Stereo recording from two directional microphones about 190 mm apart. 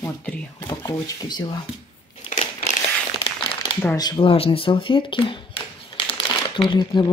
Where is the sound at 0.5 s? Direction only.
15° left (ahead or behind).